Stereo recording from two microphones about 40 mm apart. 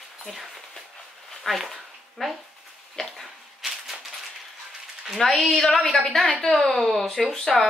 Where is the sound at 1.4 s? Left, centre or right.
Centre.